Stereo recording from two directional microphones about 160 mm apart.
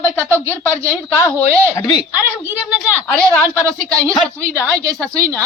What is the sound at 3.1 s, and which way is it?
Speech, 10° left (ahead or behind).